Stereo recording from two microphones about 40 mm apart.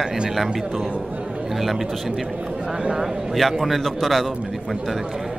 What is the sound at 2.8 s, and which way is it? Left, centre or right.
Speech, right.